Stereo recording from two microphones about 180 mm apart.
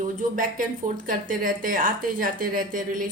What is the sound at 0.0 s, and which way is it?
A woman's voice, 50° right (ahead or behind).